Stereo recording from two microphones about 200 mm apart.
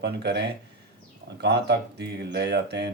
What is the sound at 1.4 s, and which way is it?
Speech, 55° right (ahead or behind).